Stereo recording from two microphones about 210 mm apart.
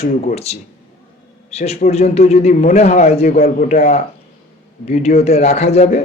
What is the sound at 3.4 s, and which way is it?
A man's voice, 40° left (ahead or behind).